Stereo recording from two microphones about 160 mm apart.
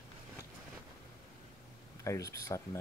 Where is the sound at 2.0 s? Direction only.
20° left (ahead or behind).